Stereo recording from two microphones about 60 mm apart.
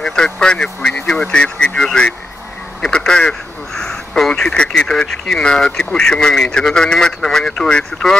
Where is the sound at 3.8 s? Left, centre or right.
Centre.